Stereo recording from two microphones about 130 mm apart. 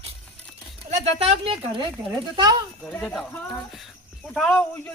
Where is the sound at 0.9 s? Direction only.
50° right (ahead or behind).